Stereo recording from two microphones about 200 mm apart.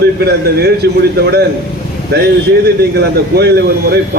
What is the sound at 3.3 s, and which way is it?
Speech, 55° right (ahead or behind).